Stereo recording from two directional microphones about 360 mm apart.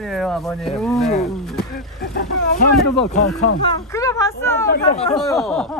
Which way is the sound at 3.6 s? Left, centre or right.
Centre.